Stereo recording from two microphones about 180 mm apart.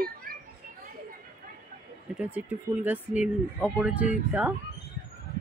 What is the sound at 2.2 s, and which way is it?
Speech, 10° right (ahead or behind).